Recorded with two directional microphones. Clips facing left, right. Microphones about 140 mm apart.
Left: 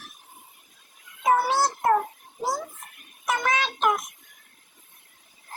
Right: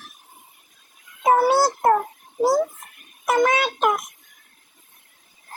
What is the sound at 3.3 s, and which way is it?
Child singing, 40° right (ahead or behind).